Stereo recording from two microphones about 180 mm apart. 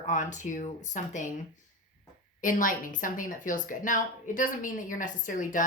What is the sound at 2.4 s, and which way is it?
A woman's voice, 50° left (ahead or behind).